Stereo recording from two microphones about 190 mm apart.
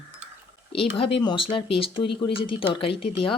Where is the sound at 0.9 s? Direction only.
25° left (ahead or behind).